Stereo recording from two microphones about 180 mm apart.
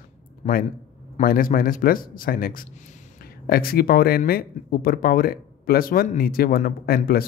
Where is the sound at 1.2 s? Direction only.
50° left (ahead or behind).